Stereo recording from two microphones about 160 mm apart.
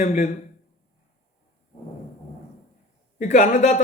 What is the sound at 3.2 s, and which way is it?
Speech, 50° left (ahead or behind).